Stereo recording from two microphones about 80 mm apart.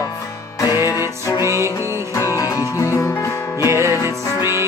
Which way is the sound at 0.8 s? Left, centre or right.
Left.